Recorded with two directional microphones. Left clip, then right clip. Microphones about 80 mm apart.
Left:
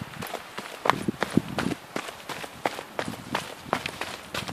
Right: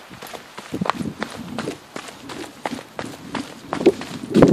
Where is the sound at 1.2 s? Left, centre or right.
Centre.